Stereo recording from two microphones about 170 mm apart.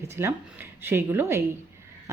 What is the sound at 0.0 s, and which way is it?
Speech, 15° right (ahead or behind).